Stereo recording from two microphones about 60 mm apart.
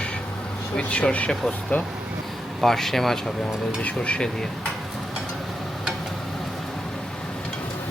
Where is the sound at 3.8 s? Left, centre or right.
Left.